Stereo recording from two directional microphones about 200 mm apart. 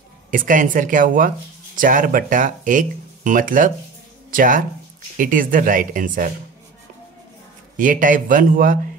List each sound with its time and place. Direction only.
0.3 s speech: 40° right (ahead or behind)
7.7 s speech: 40° right (ahead or behind)